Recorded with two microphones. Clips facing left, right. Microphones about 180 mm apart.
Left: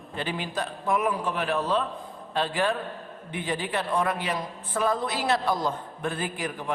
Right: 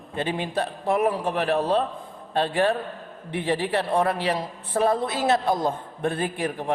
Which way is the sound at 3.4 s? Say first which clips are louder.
Right 5 dB; 30° right (ahead or behind).